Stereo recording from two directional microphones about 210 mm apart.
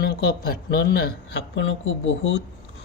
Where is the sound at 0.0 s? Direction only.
50° left (ahead or behind).